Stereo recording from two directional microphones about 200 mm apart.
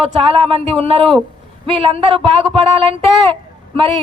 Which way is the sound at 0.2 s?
25° right (ahead or behind).